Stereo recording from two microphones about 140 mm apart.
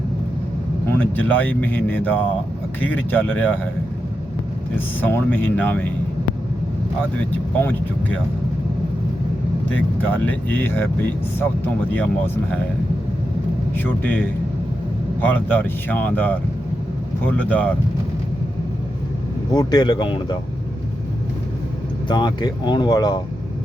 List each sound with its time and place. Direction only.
1.1 s speech: 10° left (ahead or behind)
4.9 s speech: 15° left (ahead or behind)
9.7 s speech: 10° left (ahead or behind)
13.7 s speech: 15° left (ahead or behind)
19.5 s speech: 30° left (ahead or behind)
22.1 s speech: 30° left (ahead or behind)